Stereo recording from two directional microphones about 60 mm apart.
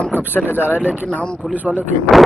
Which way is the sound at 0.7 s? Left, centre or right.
Centre.